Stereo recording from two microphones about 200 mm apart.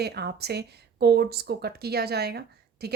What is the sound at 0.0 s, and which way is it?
A woman's voice, 55° right (ahead or behind).